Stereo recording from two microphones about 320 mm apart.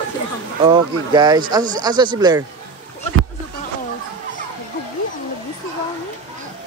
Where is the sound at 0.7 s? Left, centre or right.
Centre.